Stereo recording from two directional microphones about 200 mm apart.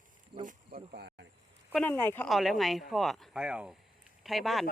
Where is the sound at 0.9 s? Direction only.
55° right (ahead or behind).